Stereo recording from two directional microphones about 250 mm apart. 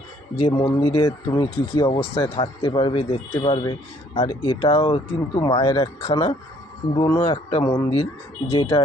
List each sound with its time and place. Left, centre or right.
0.5 s speech: centre